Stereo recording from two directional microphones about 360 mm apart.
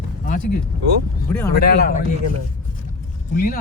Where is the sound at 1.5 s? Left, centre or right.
Left.